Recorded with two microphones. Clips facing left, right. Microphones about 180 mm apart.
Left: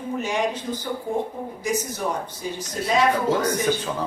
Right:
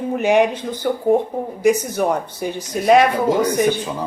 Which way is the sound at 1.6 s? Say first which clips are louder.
Right 9 dB; 65° right (ahead or behind).